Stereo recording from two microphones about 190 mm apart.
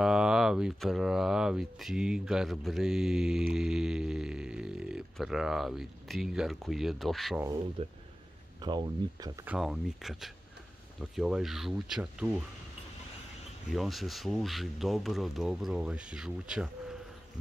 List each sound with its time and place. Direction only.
0.0 s speech: 5° right (ahead or behind)
7.8 s speech: 30° right (ahead or behind)
9.5 s speech: centre (ahead or behind)
13.7 s speech: centre (ahead or behind)